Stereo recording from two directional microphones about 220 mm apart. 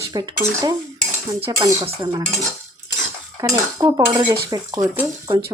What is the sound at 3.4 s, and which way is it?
Dishes, 15° right (ahead or behind).